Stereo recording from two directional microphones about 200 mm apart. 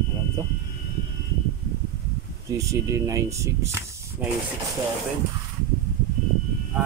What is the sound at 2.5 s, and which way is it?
Speech, 15° right (ahead or behind).